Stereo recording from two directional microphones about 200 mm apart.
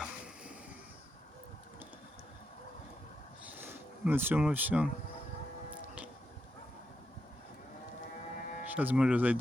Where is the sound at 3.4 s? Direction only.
10° right (ahead or behind).